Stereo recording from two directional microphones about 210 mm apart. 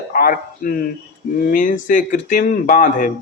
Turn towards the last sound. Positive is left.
turn(degrees=40)  # may be behind; listen again after turning